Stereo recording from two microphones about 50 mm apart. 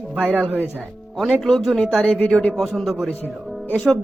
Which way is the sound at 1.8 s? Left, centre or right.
Centre.